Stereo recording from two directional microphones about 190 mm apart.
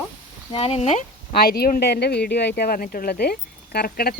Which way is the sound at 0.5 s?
30° left (ahead or behind).